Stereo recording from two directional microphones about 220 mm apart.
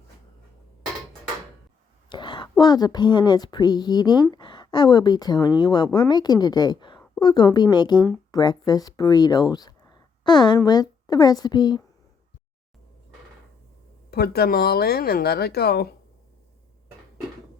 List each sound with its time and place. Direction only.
2.0 s a woman's voice: 20° left (ahead or behind)
14.1 s speech: 45° left (ahead or behind)